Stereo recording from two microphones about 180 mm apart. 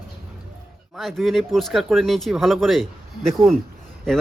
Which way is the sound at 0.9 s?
Centre (ahead or behind).